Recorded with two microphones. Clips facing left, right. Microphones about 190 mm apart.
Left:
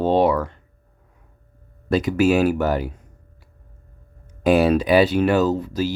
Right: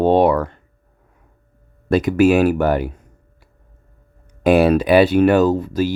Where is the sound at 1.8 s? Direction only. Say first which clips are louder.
Right 4 dB; 55° right (ahead or behind).